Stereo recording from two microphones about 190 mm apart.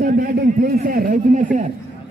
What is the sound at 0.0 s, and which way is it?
A man's voice, 50° right (ahead or behind).